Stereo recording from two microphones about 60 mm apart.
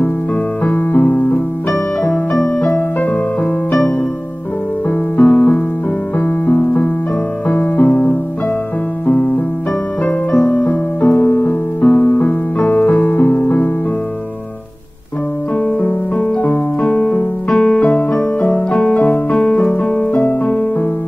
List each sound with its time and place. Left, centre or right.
0.7 s keyboard: left
2.7 s music: left
4.8 s music: left
10.4 s music: left
15.5 s keyboard: left
16.4 s music: left
17.5 s electric piano: left
18.7 s music: centre